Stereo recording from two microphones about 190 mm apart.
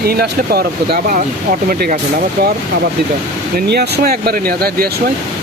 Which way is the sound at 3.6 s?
60° right (ahead or behind).